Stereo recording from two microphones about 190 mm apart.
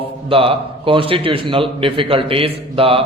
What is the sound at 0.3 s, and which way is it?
A man's voice, 30° right (ahead or behind).